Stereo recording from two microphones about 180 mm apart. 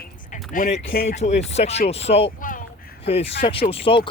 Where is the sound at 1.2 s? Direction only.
40° left (ahead or behind).